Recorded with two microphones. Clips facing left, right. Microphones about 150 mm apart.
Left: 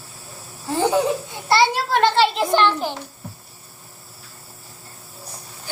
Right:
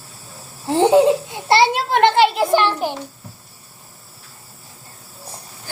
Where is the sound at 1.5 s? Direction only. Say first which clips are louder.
Right 2 dB; 25° right (ahead or behind).